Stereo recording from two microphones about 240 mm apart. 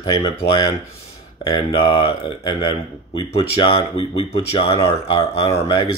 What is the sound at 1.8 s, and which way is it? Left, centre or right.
Speech, left.